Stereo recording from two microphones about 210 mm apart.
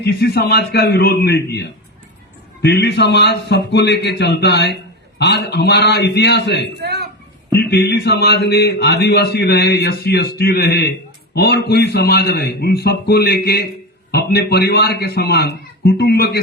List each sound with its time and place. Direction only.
0.0 s a man's voice: 50° left (ahead or behind)
6.8 s a sound: 50° right (ahead or behind)
7.6 s a man's voice: 50° left (ahead or behind)